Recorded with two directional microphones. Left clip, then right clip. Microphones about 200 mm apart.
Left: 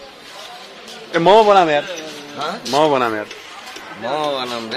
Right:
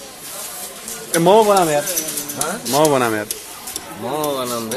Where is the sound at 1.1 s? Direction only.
15° left (ahead or behind).